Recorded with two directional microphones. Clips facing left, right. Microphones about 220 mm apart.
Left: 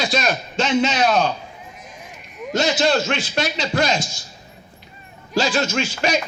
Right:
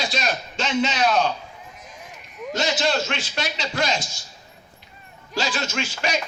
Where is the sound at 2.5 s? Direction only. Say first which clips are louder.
Left 5 dB; 50° left (ahead or behind).